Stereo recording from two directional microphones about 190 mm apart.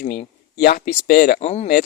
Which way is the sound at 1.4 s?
35° left (ahead or behind).